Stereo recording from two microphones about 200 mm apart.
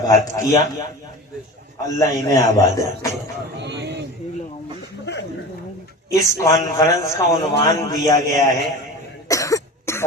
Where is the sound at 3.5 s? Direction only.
60° right (ahead or behind).